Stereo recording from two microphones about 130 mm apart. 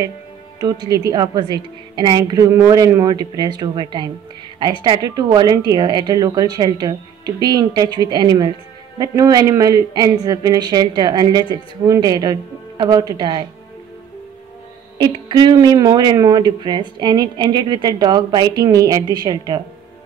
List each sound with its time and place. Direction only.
0.6 s speech: 30° right (ahead or behind)
15.0 s speech: 35° right (ahead or behind)